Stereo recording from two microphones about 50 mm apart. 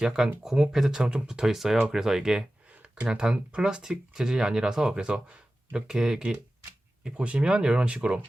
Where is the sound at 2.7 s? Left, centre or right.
Right.